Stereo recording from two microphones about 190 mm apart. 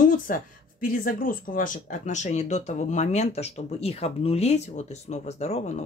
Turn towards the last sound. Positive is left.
turn(degrees=35)  # may be behind; listen again after turning